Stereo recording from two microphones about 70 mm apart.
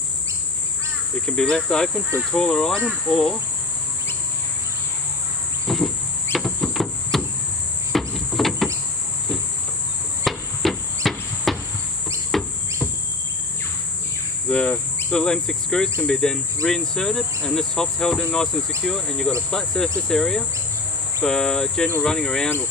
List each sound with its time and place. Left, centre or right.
1.2 s speech: centre
3.1 s cricket: centre
5.7 s a sound: centre
7.9 s insect: centre
10.2 s hammer: centre
11.5 s cricket: centre
12.3 s a sound: centre
14.5 s speech: centre